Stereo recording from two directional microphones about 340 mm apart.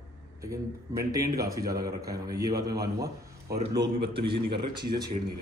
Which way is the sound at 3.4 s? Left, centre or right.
Right.